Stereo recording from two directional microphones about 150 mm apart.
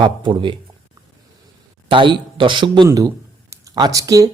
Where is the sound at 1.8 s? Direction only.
35° right (ahead or behind).